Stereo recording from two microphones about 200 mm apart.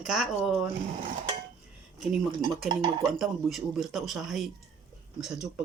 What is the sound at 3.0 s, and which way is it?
Speech, centre (ahead or behind).